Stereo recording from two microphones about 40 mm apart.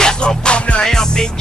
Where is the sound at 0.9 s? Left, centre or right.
Centre.